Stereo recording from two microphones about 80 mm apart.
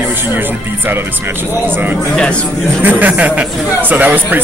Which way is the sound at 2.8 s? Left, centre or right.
Right.